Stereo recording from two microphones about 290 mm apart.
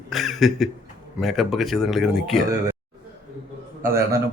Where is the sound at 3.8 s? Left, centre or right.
Right.